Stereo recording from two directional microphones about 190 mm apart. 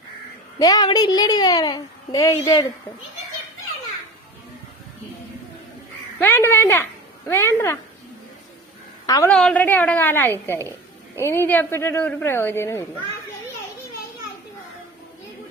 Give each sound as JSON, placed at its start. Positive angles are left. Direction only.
{"t": 0.6, "sound": "a woman's voice", "side_deg": 20}
{"t": 6.1, "sound": "speech", "side_deg": 10}
{"t": 9.0, "sound": "a woman's voice", "side_deg": 20}
{"t": 9.3, "sound": "speech", "side_deg": 5}